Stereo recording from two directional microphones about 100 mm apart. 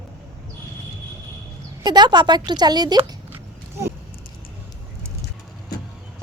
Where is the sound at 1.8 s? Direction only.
45° right (ahead or behind).